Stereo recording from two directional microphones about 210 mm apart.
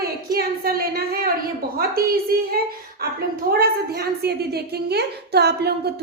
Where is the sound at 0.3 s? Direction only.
45° right (ahead or behind).